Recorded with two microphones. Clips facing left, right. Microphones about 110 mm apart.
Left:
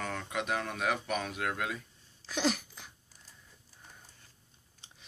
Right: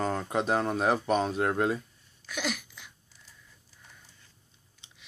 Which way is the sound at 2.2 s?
35° left (ahead or behind).